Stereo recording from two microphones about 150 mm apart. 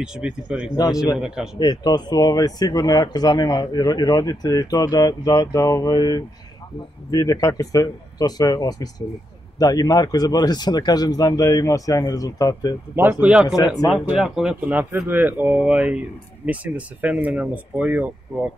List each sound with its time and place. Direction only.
0.0 s a man's voice: 5° right (ahead or behind)
1.6 s speech: 25° left (ahead or behind)
12.9 s speech: 15° right (ahead or behind)